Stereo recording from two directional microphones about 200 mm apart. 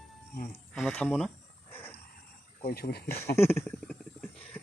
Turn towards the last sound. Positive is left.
turn(degrees=5)  # may be behind; listen again after turning